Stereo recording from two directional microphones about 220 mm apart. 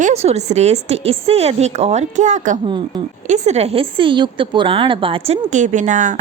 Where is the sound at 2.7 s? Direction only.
20° right (ahead or behind).